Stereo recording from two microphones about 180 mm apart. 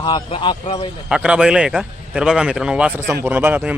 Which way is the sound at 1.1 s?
5° right (ahead or behind).